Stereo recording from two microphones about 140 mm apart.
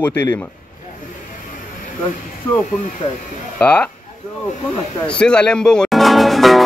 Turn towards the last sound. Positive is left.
turn(degrees=0)  # may be behind; listen again after turning